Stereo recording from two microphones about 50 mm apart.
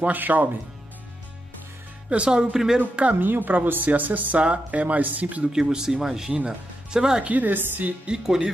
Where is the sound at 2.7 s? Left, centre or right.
Right.